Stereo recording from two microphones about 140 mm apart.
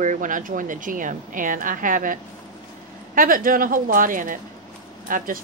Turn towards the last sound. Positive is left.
turn(degrees=-75)  # may be behind; listen again after turning